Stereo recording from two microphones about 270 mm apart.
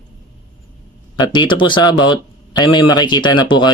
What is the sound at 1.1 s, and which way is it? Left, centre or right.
Speech, centre.